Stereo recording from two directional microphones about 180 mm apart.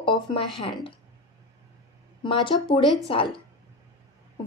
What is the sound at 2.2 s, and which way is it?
A woman's voice, 30° left (ahead or behind).